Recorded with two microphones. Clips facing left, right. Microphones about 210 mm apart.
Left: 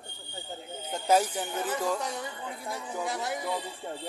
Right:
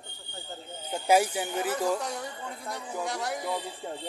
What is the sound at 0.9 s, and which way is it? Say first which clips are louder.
Speech: right 1 dB; 10° right (ahead or behind).